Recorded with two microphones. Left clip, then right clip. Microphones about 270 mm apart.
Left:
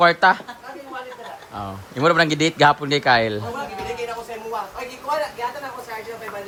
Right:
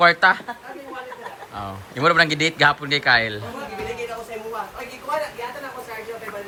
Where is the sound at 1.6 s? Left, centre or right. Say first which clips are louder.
Left 1 dB; centre.